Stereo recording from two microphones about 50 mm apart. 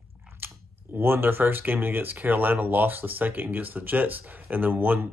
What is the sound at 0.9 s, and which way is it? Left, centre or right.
Speech, right.